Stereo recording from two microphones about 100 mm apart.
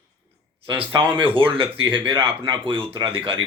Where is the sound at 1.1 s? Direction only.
60° right (ahead or behind).